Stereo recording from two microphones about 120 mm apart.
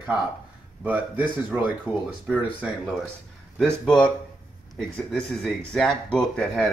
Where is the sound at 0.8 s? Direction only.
15° right (ahead or behind).